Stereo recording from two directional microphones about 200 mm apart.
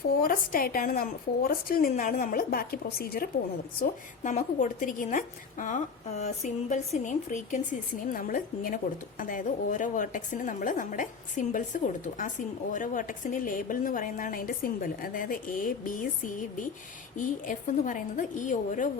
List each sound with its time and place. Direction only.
0.2 s a woman's voice: 45° left (ahead or behind)
4.2 s a woman's voice: 40° left (ahead or behind)